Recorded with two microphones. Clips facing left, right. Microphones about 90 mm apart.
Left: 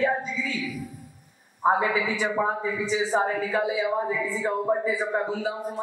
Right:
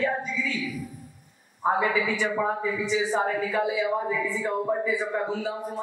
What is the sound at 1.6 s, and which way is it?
Speech, 20° left (ahead or behind).